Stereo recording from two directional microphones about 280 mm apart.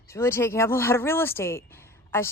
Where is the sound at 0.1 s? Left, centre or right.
Centre.